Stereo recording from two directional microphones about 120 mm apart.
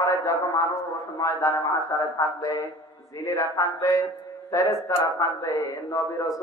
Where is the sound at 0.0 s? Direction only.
30° left (ahead or behind).